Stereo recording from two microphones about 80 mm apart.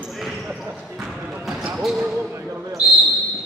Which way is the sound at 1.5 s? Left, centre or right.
Centre.